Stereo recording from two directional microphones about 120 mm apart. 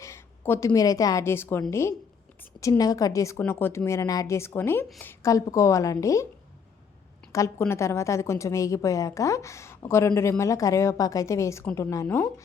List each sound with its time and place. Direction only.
0.0 s a woman's voice: 20° left (ahead or behind)
5.3 s a woman's voice: 25° left (ahead or behind)
7.3 s a woman's voice: 25° left (ahead or behind)